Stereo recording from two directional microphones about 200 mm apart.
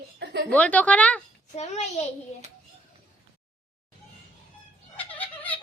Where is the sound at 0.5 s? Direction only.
5° left (ahead or behind).